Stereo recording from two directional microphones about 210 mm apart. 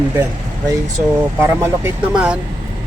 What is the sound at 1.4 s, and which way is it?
Speech, 10° right (ahead or behind).